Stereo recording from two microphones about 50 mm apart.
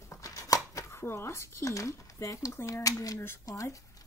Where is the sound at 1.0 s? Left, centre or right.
Left.